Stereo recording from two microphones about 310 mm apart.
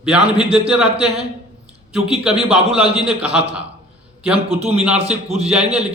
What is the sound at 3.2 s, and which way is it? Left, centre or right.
Speech, centre.